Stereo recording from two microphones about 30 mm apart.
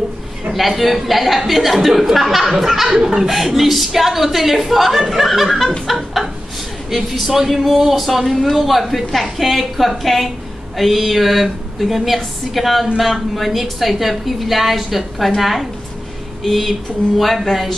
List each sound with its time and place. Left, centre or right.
0.5 s a woman's voice: centre
2.9 s speech: right
3.2 s a woman's voice: centre
5.6 s chuckle: centre
7.0 s a woman's voice: centre
17.2 s a woman's voice: centre